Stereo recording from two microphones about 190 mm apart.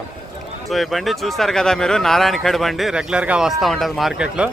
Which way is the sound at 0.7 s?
Centre (ahead or behind).